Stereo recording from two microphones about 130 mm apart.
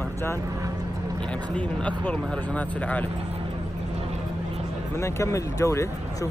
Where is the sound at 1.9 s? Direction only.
10° left (ahead or behind).